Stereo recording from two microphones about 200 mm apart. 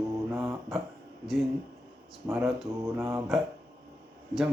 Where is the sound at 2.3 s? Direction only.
Centre (ahead or behind).